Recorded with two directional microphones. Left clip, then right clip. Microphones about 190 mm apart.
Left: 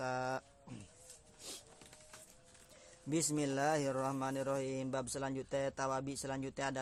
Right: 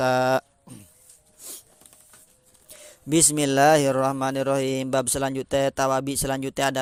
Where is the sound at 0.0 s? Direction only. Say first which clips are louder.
Right 18 dB; 40° right (ahead or behind).